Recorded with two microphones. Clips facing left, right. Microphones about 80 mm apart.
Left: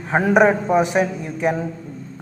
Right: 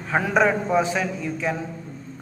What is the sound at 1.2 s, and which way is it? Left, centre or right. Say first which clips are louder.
Speech: left 5 dB; left.